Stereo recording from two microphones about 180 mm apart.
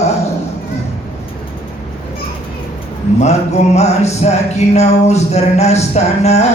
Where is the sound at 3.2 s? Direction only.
40° left (ahead or behind).